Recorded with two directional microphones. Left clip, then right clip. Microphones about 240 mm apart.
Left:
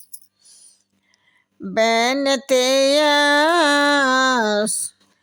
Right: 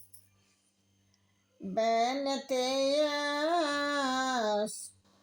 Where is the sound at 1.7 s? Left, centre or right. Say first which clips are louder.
Left 11 dB; left.